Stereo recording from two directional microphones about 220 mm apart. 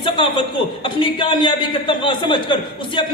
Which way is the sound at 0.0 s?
20° left (ahead or behind).